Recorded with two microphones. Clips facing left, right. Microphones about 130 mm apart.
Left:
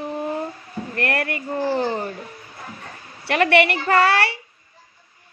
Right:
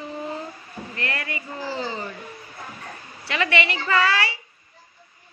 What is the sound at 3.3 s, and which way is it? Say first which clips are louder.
A man's voice: left 7 dB; 55° left (ahead or behind).